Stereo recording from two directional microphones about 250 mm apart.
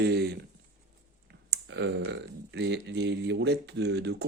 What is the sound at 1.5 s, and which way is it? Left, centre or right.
Speech, right.